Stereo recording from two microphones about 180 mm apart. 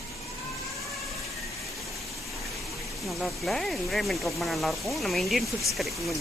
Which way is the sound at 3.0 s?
Centre (ahead or behind).